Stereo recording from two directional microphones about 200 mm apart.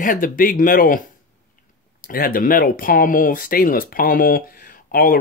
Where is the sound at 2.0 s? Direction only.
45° left (ahead or behind).